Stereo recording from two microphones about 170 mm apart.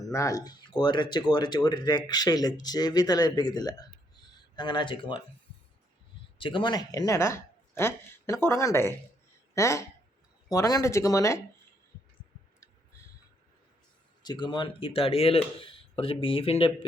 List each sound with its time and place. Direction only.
0.0 s speech: 20° left (ahead or behind)
6.4 s speech: 30° left (ahead or behind)
14.2 s speech: 25° left (ahead or behind)